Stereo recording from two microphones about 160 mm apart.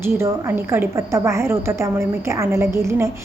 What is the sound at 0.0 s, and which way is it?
A woman's voice, 15° right (ahead or behind).